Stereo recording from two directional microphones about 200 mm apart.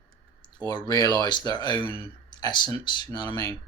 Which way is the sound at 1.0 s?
20° left (ahead or behind).